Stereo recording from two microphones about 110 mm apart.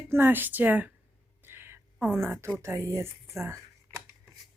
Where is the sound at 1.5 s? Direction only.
20° right (ahead or behind).